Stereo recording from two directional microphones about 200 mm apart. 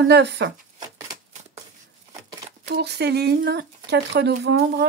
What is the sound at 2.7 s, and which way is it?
Speech, 55° right (ahead or behind).